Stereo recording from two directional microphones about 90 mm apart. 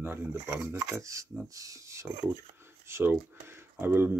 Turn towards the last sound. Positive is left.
turn(degrees=-25)  # may be behind; listen again after turning